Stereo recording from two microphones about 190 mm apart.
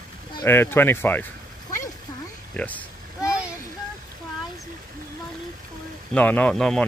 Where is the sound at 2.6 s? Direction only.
10° left (ahead or behind).